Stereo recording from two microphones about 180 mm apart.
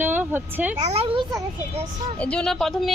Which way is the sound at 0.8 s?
35° right (ahead or behind).